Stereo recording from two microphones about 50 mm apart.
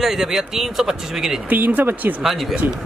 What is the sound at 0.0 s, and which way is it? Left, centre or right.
Speech, centre.